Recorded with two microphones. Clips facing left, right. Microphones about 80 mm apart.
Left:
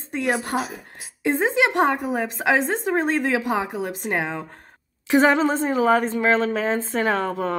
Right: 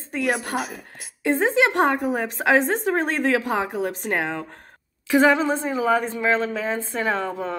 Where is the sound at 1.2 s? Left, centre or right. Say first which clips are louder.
Right 1 dB; centre.